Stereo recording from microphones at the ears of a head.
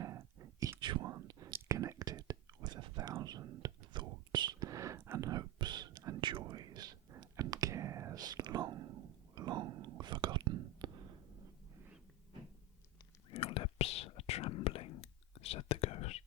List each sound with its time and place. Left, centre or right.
0.0 s whispering: right
13.3 s whispering: left